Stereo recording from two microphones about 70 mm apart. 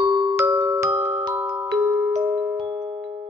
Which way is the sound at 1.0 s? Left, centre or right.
Right.